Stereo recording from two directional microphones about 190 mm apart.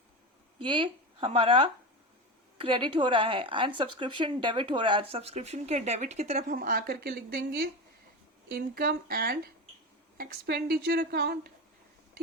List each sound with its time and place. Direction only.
0.6 s a woman's voice: 25° right (ahead or behind)
6.6 s a woman's voice: 50° right (ahead or behind)